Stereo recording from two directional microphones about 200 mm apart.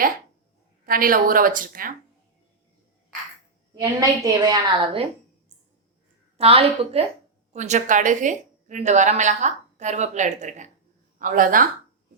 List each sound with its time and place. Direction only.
0.9 s speech: 45° right (ahead or behind)
3.8 s a woman's voice: 20° right (ahead or behind)
6.3 s a woman's voice: 30° right (ahead or behind)